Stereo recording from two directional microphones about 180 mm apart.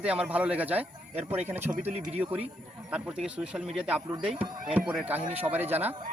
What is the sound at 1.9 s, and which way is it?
Speech, 35° right (ahead or behind).